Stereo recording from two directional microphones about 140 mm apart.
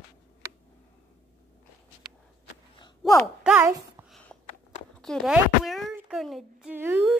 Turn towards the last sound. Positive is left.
turn(degrees=-15)  # may be behind; listen again after turning